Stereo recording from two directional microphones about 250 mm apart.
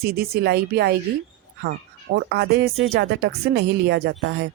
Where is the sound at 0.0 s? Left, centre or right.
Right.